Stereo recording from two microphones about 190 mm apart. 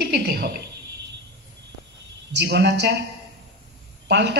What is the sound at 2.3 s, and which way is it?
Speech, 65° right (ahead or behind).